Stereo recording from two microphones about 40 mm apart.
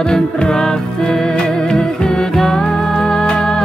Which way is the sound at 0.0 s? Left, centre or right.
Centre.